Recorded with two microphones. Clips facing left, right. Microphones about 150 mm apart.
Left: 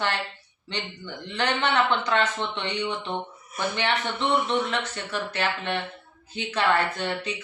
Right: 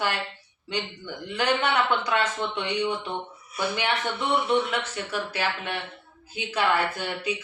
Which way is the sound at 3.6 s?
45° left (ahead or behind).